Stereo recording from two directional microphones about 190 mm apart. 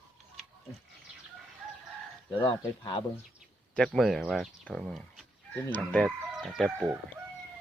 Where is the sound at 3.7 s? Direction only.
5° left (ahead or behind).